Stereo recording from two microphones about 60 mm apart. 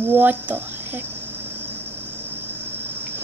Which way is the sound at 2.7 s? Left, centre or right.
Right.